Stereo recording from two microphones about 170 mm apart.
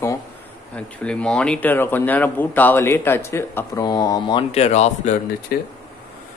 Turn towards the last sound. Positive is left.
turn(degrees=65)  # may be behind; listen again after turning